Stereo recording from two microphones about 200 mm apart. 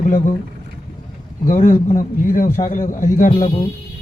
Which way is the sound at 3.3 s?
30° left (ahead or behind).